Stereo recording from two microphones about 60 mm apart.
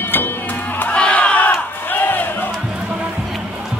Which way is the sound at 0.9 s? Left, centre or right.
Centre.